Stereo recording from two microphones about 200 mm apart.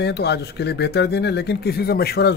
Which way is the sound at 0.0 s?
55° left (ahead or behind).